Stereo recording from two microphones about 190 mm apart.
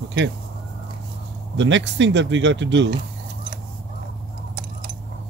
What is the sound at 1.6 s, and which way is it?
Speech, 75° right (ahead or behind).